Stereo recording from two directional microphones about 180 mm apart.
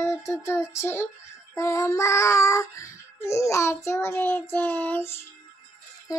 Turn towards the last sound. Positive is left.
turn(degrees=15)  # may be behind; listen again after turning